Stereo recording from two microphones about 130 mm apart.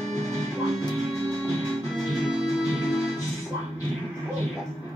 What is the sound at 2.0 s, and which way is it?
Music, 5° right (ahead or behind).